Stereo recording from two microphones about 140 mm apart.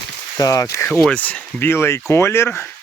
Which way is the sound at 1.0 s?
10° left (ahead or behind).